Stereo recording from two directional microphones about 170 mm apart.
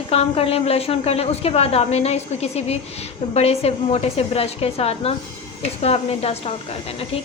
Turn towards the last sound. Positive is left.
turn(degrees=35)  # may be behind; listen again after turning